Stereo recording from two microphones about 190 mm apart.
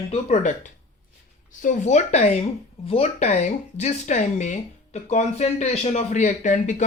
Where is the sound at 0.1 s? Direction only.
35° left (ahead or behind).